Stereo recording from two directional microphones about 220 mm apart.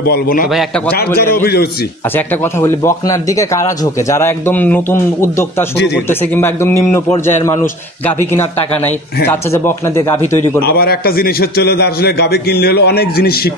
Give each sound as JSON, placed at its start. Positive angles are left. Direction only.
{"t": 0.0, "sound": "a man's voice", "side_deg": 40}
{"t": 0.5, "sound": "a man's voice", "side_deg": 0}
{"t": 1.3, "sound": "a man's voice", "side_deg": 45}
{"t": 2.1, "sound": "speech", "side_deg": 10}
{"t": 10.6, "sound": "a man's voice", "side_deg": 45}